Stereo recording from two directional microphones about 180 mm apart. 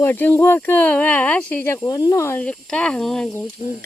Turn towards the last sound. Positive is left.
turn(degrees=5)  # may be behind; listen again after turning